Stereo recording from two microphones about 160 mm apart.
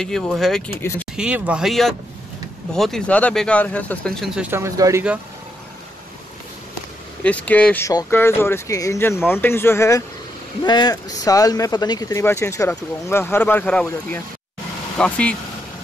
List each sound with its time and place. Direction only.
0.0 s speech: 5° left (ahead or behind)
4.4 s speech: 15° right (ahead or behind)
7.2 s speech: 10° left (ahead or behind)
15.0 s speech: 5° left (ahead or behind)